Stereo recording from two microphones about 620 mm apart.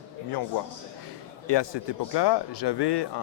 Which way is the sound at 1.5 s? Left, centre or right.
Left.